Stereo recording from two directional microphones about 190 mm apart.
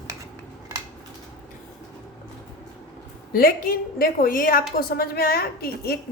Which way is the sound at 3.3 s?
50° left (ahead or behind).